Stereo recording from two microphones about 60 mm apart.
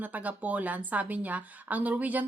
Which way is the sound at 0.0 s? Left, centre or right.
Right.